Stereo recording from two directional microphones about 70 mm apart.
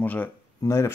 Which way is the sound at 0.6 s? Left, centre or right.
Left.